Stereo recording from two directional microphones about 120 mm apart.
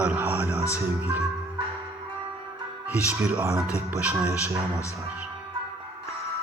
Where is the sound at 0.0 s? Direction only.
15° right (ahead or behind).